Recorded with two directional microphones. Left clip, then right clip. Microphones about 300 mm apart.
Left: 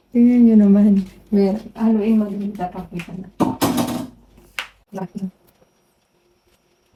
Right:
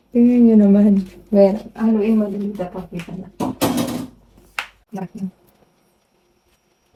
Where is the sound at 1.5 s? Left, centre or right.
Centre.